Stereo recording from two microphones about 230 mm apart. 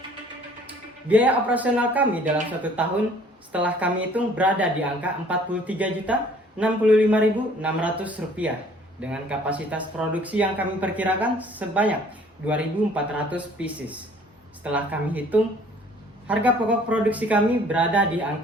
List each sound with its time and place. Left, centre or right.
1.0 s speech: centre